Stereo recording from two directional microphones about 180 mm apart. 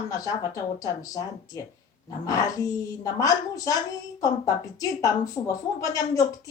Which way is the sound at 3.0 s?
20° left (ahead or behind).